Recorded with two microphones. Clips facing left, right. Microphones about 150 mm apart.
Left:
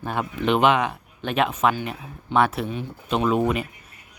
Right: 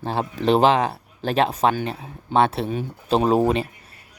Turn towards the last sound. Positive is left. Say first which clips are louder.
# right 3 dB
turn(degrees=-35)  # may be behind; listen again after turning